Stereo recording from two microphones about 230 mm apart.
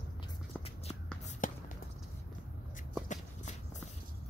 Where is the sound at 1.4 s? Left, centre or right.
Left.